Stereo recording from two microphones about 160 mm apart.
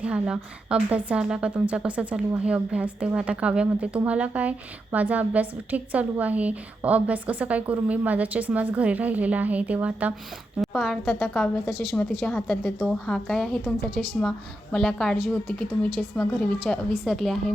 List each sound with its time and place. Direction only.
0.0 s a woman's voice: 5° right (ahead or behind)
10.6 s a woman's voice: centre (ahead or behind)